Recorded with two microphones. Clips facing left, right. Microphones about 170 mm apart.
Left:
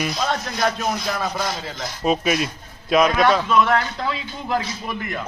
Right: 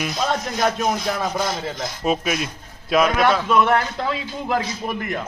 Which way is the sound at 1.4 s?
45° right (ahead or behind).